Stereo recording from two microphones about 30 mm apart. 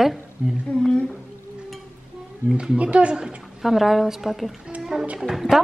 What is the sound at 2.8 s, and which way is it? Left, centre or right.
Speech, right.